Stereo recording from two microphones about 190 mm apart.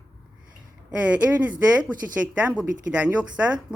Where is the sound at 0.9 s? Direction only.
5° right (ahead or behind).